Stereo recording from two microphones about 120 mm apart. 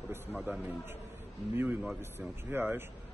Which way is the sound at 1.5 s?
15° right (ahead or behind).